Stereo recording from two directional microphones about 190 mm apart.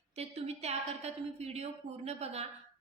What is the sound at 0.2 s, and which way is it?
A woman's voice, 35° right (ahead or behind).